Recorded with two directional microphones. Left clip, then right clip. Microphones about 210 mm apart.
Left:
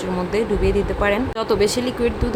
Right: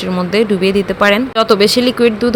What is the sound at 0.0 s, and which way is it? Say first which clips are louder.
Speech: right 7 dB; 15° right (ahead or behind).